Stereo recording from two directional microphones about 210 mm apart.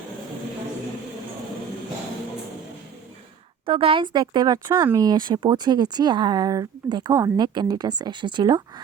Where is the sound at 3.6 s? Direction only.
25° right (ahead or behind).